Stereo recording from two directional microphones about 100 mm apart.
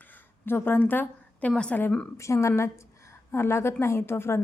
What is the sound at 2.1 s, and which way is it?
Speech, 30° left (ahead or behind).